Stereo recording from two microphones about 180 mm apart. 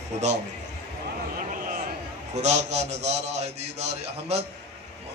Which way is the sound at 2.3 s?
40° right (ahead or behind).